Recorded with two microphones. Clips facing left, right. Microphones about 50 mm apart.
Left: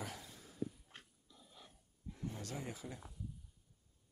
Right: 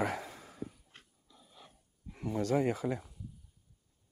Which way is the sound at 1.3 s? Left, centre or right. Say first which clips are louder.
Right 3 dB; right.